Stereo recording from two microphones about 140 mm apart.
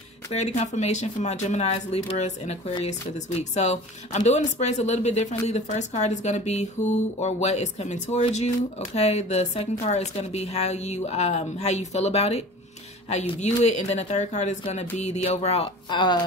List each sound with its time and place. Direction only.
0.3 s speech: 55° left (ahead or behind)
15.9 s speech: 35° left (ahead or behind)